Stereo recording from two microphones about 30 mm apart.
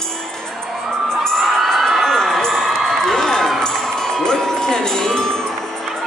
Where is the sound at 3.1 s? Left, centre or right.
Centre.